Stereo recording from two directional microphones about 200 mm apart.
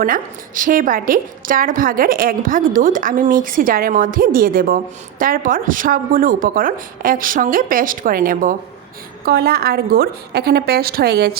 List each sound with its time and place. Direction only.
0.0 s a woman's voice: 45° right (ahead or behind)